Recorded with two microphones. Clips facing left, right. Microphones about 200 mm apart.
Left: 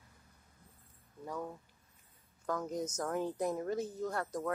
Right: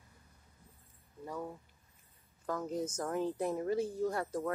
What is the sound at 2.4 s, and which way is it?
Speech, 5° right (ahead or behind).